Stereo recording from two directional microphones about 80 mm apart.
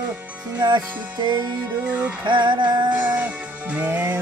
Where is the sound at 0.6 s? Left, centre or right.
Right.